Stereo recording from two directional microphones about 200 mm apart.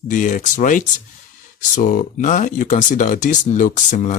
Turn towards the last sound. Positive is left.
turn(degrees=40)  # may be behind; listen again after turning